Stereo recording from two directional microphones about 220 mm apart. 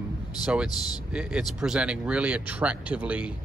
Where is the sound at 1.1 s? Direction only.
5° right (ahead or behind).